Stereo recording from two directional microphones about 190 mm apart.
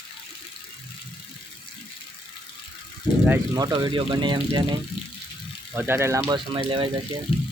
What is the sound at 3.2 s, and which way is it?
Speech, 15° right (ahead or behind).